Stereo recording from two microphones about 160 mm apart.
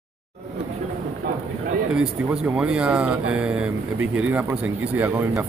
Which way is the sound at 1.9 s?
5° right (ahead or behind).